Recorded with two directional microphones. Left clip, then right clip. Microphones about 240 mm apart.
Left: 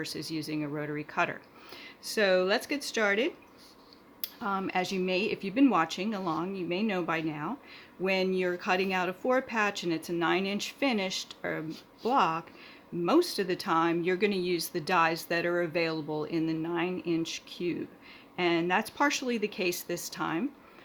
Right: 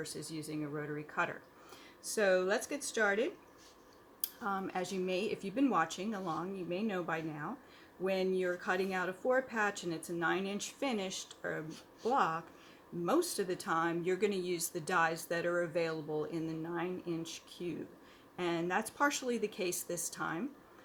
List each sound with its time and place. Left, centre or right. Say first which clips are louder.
0.0 s speech: left 7 dB; left